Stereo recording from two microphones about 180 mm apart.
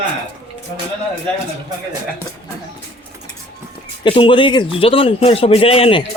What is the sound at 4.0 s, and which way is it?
A man's voice, 30° left (ahead or behind).